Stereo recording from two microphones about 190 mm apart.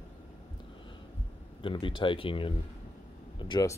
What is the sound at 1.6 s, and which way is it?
Speech, 25° left (ahead or behind).